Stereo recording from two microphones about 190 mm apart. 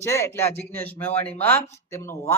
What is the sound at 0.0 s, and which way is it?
Speech, 15° left (ahead or behind).